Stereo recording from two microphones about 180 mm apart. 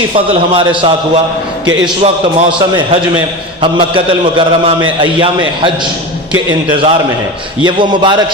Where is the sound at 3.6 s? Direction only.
30° right (ahead or behind).